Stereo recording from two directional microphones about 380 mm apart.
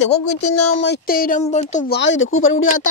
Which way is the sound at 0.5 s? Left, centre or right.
Left.